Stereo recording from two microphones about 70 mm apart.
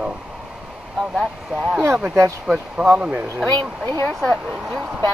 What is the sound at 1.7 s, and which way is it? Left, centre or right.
Speech, centre.